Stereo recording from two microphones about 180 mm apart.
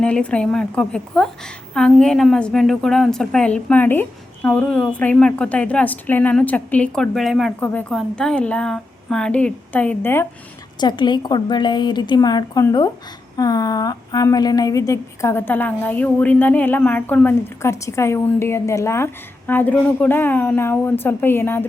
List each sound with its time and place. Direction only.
0.0 s a woman's voice: 5° left (ahead or behind)
10.8 s a woman's voice: 25° left (ahead or behind)